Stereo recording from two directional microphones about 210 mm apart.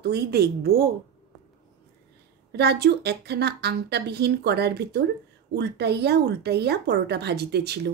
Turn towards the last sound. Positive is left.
turn(degrees=-50)  # may be behind; listen again after turning